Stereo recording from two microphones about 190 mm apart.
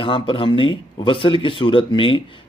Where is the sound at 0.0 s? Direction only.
25° left (ahead or behind).